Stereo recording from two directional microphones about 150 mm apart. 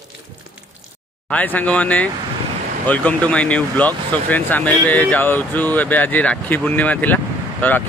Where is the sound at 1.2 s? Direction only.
10° left (ahead or behind).